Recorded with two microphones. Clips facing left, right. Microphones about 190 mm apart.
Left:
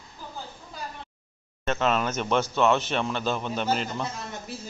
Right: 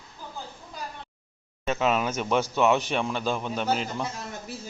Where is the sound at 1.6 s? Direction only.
5° right (ahead or behind).